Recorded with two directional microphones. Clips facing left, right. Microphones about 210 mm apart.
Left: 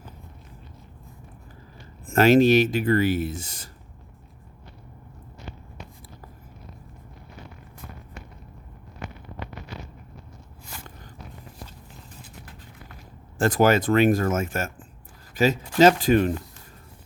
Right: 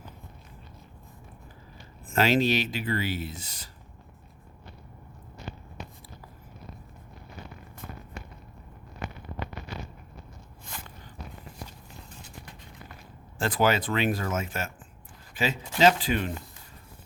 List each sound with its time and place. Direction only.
2.1 s speech: 45° left (ahead or behind)
13.4 s speech: 45° left (ahead or behind)